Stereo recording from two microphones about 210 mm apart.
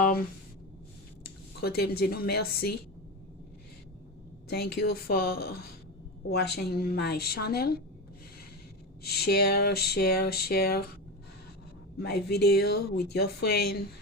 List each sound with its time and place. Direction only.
1.2 s speech: 50° left (ahead or behind)
4.4 s speech: 50° left (ahead or behind)
9.0 s speech: 50° left (ahead or behind)
11.9 s speech: 50° left (ahead or behind)